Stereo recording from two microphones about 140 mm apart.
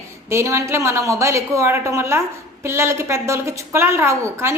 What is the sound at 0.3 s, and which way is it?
A woman's voice, 20° right (ahead or behind).